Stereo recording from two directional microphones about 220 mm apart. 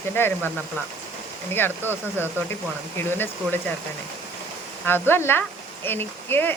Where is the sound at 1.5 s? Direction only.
10° left (ahead or behind).